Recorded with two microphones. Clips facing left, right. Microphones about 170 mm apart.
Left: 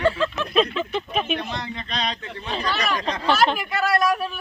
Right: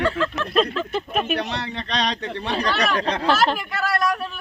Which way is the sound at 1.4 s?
80° right.